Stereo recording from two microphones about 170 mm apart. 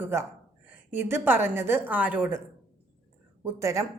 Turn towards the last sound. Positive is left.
turn(degrees=-20)  # may be behind; listen again after turning